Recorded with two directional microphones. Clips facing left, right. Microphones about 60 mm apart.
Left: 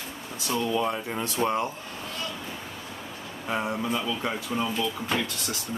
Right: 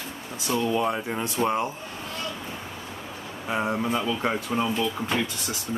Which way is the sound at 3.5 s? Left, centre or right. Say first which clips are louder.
Right 2 dB; centre.